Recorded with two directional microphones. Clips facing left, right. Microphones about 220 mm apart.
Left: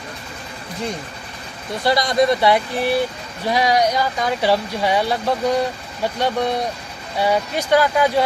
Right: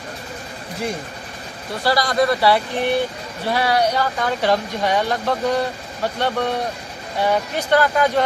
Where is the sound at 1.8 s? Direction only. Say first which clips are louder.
Left 1 dB; 20° left (ahead or behind).